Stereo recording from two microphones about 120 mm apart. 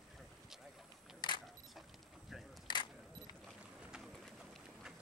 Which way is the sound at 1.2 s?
40° left (ahead or behind).